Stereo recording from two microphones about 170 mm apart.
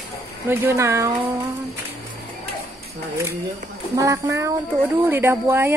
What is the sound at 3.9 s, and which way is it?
Speech, 20° right (ahead or behind).